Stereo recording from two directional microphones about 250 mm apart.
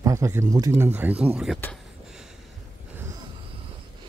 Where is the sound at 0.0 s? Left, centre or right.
Centre.